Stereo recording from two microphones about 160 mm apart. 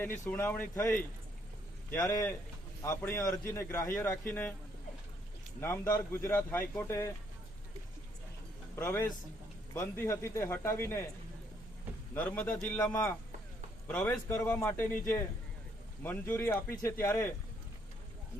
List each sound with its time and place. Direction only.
0.3 s a man's voice: 10° left (ahead or behind)
5.5 s a man's voice: 15° left (ahead or behind)
8.7 s a man's voice: 15° left (ahead or behind)
12.1 s a man's voice: 10° left (ahead or behind)
13.8 s a man's voice: 10° left (ahead or behind)